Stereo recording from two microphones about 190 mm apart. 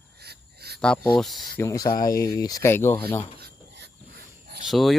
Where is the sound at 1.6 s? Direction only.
15° left (ahead or behind).